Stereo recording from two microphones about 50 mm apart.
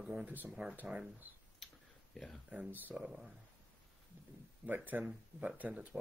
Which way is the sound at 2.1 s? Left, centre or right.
Centre.